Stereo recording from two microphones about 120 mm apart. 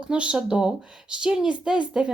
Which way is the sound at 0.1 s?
5° right (ahead or behind).